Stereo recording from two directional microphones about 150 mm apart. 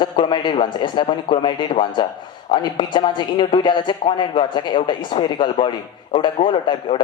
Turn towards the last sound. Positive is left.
turn(degrees=35)  # may be behind; listen again after turning